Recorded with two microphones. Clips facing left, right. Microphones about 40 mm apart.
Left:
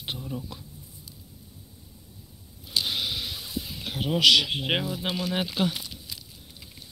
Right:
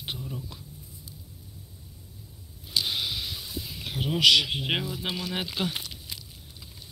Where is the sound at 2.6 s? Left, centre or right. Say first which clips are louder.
Left 1 dB; left.